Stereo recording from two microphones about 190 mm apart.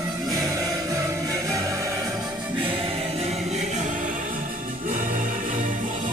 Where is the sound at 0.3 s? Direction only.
15° right (ahead or behind).